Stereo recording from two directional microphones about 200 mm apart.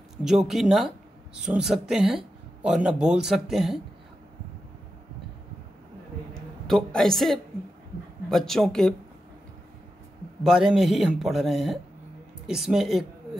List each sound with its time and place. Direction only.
0.2 s speech: centre (ahead or behind)
6.7 s speech: centre (ahead or behind)
10.4 s speech: centre (ahead or behind)